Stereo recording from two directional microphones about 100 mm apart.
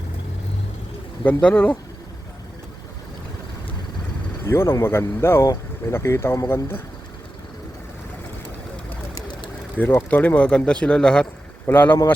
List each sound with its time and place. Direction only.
1.2 s speech: 15° left (ahead or behind)
4.4 s speech: 25° left (ahead or behind)
9.7 s speech: 20° left (ahead or behind)
11.6 s speech: 20° left (ahead or behind)